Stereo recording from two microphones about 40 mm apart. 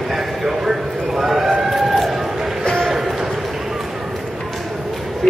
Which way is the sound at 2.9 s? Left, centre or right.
Centre.